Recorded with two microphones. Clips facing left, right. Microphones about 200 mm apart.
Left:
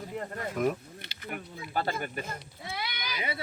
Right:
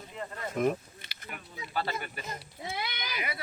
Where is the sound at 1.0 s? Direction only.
70° left (ahead or behind).